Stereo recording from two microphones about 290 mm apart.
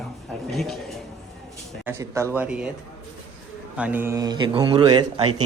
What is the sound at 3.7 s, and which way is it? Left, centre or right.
Speech, centre.